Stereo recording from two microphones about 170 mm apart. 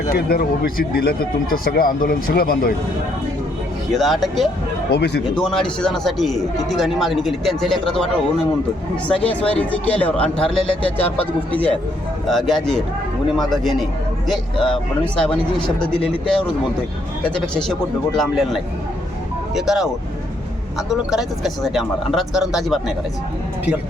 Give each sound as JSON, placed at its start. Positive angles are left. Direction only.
{"t": 0.1, "sound": "speech", "side_deg": 60}
{"t": 3.9, "sound": "speech", "side_deg": 0}
{"t": 4.9, "sound": "speech", "side_deg": 75}
{"t": 5.4, "sound": "speech", "side_deg": 5}
{"t": 16.0, "sound": "speech", "side_deg": 5}